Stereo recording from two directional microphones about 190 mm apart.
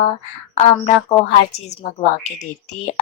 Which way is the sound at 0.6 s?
35° left (ahead or behind).